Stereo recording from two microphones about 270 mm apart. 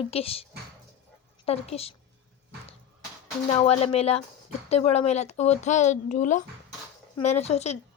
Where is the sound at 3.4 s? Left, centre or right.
Left.